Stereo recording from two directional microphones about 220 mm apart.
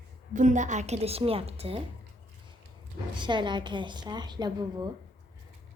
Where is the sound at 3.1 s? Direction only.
20° right (ahead or behind).